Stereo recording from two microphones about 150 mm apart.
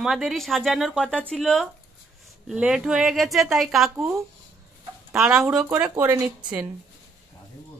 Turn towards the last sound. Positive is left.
turn(degrees=-10)  # may be behind; listen again after turning